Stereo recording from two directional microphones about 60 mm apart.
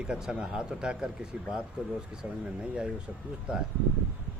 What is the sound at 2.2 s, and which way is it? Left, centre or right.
Speech, centre.